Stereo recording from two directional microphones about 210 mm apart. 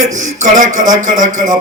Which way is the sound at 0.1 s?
35° right (ahead or behind).